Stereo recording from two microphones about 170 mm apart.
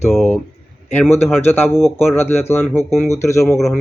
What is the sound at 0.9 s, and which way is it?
Speech, 10° left (ahead or behind).